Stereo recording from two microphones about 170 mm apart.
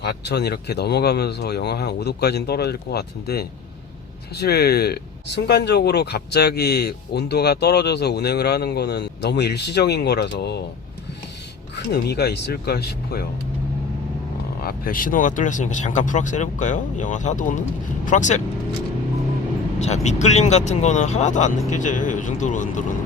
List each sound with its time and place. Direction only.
0.0 s speech: 75° left (ahead or behind)
11.9 s speech: 70° left (ahead or behind)
14.6 s speech: 60° left (ahead or behind)
19.8 s speech: 40° left (ahead or behind)